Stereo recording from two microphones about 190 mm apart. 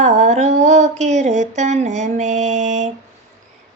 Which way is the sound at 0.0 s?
35° right (ahead or behind).